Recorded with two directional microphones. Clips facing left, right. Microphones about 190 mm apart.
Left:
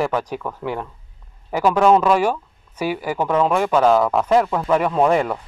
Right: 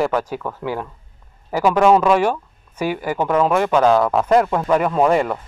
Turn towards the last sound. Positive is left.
turn(degrees=0)  # may be behind; listen again after turning